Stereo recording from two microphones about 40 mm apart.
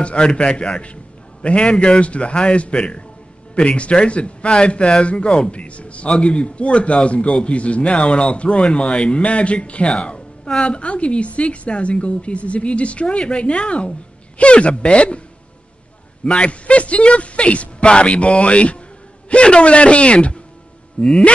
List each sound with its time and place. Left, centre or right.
0.0 s a man's voice: left
16.3 s a man's voice: left
21.0 s music: left